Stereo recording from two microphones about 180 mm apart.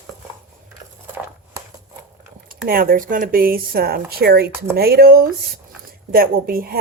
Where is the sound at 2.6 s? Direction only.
55° right (ahead or behind).